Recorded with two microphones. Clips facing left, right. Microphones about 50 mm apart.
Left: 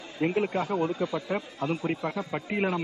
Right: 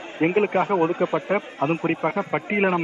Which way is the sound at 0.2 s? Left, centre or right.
Right.